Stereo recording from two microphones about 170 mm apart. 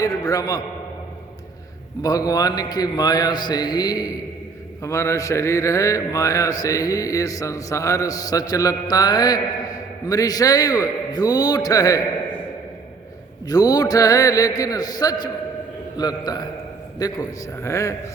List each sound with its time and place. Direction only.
0.0 s speech: 20° left (ahead or behind)
2.0 s speech: 20° left (ahead or behind)
13.5 s a man's voice: 20° left (ahead or behind)